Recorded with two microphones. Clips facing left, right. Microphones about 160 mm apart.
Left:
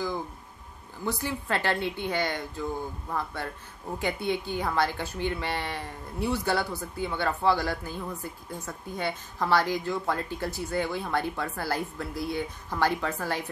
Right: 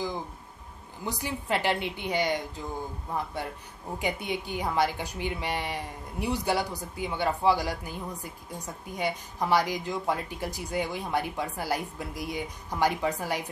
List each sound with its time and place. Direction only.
1.0 s speech: 15° right (ahead or behind)